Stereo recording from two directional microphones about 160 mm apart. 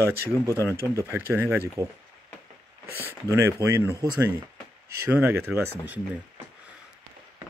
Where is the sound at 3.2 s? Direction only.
20° right (ahead or behind).